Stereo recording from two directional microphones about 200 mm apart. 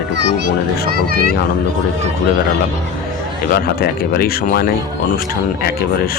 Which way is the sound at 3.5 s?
50° left (ahead or behind).